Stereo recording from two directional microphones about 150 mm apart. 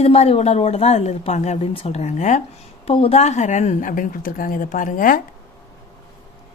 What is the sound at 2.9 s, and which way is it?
A woman's voice, 40° left (ahead or behind).